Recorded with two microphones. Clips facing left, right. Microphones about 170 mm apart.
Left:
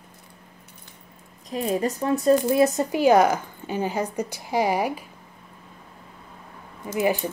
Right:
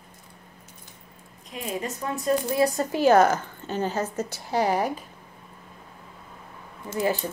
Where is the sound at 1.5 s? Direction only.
35° left (ahead or behind); by 5.0 s 10° left (ahead or behind).